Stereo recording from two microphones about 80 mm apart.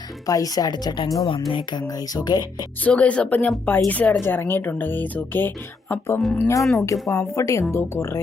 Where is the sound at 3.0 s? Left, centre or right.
Centre.